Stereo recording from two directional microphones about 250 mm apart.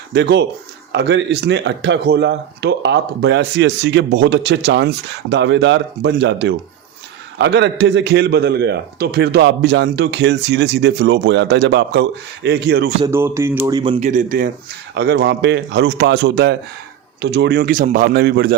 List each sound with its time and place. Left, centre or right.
0.1 s speech: right
13.1 s speech: centre; by 14.5 s right
14.9 s speech: right